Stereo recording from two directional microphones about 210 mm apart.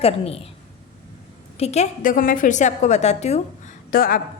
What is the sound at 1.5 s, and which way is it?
A woman's voice, 30° left (ahead or behind).